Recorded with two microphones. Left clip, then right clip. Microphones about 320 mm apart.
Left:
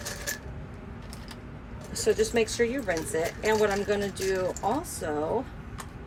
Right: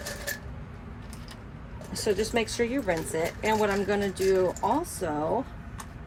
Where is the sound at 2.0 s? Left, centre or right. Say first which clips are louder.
Left 2 dB; centre.